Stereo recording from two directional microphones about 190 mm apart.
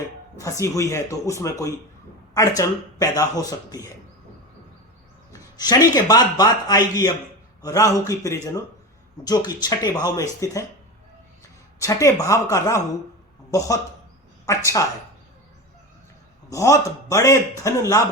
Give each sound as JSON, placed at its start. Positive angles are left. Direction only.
{"t": 0.6, "sound": "a man's voice", "side_deg": 15}
{"t": 5.3, "sound": "a man's voice", "side_deg": 20}
{"t": 11.8, "sound": "a man's voice", "side_deg": 15}
{"t": 14.4, "sound": "speech", "side_deg": 15}
{"t": 16.5, "sound": "a man's voice", "side_deg": 15}